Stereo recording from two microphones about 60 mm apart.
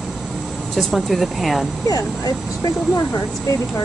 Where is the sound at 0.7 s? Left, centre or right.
Centre.